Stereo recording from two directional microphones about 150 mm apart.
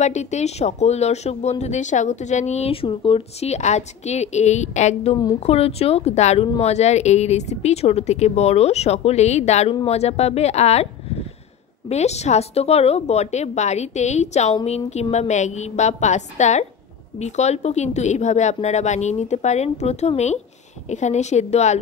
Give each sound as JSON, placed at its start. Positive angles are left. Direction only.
{"t": 0.0, "sound": "speech", "side_deg": 50}